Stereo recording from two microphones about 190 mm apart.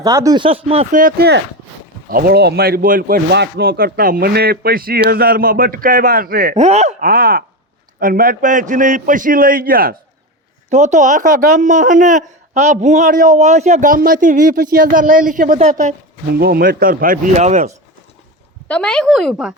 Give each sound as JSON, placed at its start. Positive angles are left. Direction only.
{"t": 0.0, "sound": "speech", "side_deg": -15}
{"t": 0.9, "sound": "speech", "side_deg": -55}
{"t": 10.7, "sound": "speech", "side_deg": -40}
{"t": 16.3, "sound": "speech", "side_deg": -55}
{"t": 18.7, "sound": "speech", "side_deg": 5}